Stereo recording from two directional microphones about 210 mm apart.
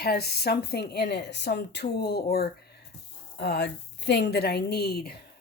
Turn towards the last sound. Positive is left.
turn(degrees=50)  # may be behind; listen again after turning